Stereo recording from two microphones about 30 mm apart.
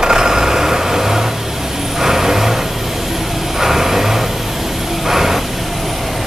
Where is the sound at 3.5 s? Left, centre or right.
Centre.